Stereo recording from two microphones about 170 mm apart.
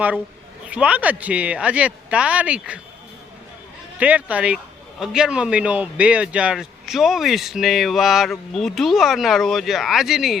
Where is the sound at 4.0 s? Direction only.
10° right (ahead or behind).